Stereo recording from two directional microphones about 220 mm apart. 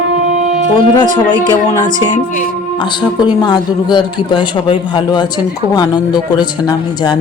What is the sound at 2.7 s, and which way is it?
Speech, 20° left (ahead or behind).